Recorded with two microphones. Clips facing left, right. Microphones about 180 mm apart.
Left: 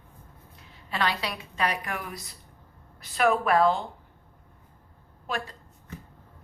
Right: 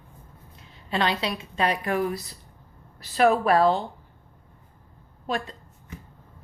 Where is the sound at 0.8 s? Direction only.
25° right (ahead or behind).